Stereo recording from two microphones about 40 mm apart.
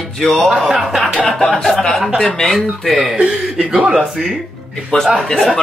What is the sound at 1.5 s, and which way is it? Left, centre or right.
Speech, centre.